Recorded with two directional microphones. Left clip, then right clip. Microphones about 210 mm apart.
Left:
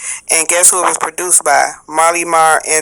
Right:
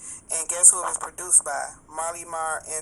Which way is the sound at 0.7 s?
65° left (ahead or behind).